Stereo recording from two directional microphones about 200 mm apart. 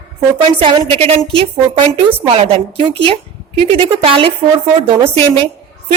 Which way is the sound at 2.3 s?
30° right (ahead or behind).